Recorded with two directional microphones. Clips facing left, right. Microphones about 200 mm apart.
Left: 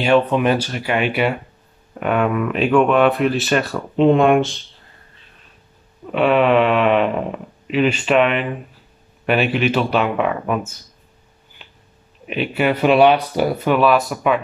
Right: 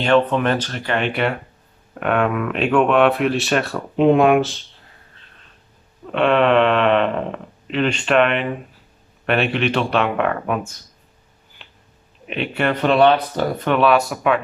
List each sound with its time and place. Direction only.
0.0 s speech: 10° left (ahead or behind)
6.1 s speech: 5° left (ahead or behind)
11.6 s a sound: centre (ahead or behind)
12.3 s speech: 5° left (ahead or behind)